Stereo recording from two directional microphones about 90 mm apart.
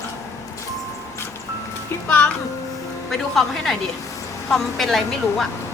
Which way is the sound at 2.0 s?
20° left (ahead or behind).